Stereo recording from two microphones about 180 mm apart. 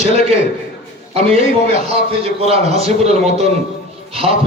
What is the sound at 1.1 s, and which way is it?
A man's voice, 35° right (ahead or behind).